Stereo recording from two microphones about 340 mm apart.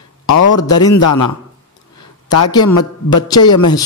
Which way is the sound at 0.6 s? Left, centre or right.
Centre.